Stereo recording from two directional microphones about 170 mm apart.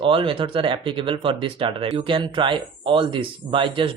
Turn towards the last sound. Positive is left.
turn(degrees=-30)  # may be behind; listen again after turning